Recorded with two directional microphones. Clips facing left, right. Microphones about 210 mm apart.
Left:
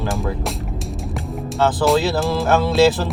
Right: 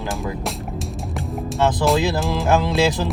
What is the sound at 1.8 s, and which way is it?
Speech, centre (ahead or behind).